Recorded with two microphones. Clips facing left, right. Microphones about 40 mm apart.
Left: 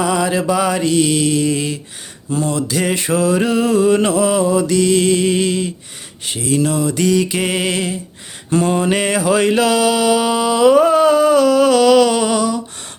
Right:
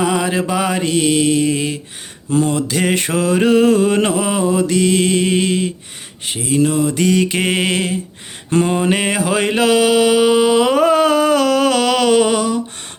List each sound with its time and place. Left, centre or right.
0.0 s mantra: right
6.2 s mantra: centre; by 7.9 s right
8.6 s mantra: centre; by 12.5 s right